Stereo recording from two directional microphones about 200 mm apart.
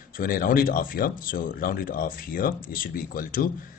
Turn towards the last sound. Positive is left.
turn(degrees=45)  # may be behind; listen again after turning